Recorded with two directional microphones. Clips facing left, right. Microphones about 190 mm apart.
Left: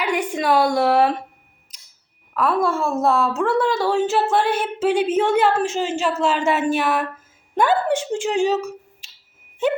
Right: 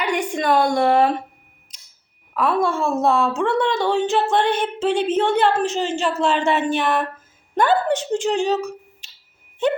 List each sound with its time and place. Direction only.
0.0 s a woman's voice: 5° left (ahead or behind)
2.3 s a woman's voice: centre (ahead or behind)